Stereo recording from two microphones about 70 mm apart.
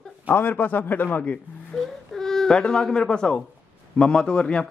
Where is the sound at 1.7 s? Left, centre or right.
Centre.